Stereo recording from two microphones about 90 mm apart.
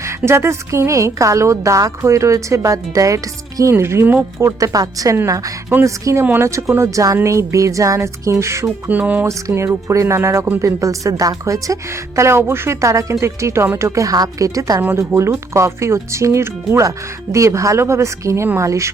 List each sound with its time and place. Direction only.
0.3 s a woman's voice: 30° right (ahead or behind)
8.9 s speech: 15° right (ahead or behind)
9.2 s a woman's voice: 35° right (ahead or behind)
14.8 s a woman's voice: 25° right (ahead or behind)